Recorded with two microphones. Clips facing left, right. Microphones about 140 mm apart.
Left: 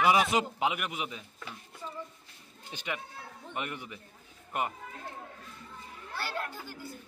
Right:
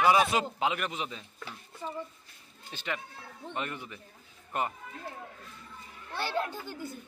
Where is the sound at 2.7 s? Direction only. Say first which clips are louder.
Right 1 dB; 15° left (ahead or behind).